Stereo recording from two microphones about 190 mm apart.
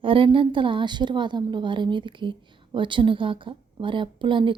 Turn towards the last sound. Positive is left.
turn(degrees=-25)  # may be behind; listen again after turning